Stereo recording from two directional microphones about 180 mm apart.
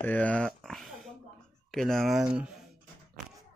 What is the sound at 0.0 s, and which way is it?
Speech, 10° left (ahead or behind).